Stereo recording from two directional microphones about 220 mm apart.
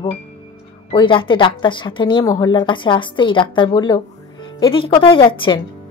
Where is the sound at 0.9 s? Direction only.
20° left (ahead or behind).